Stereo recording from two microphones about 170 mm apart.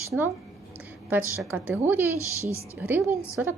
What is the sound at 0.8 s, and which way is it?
A woman's voice, 10° right (ahead or behind).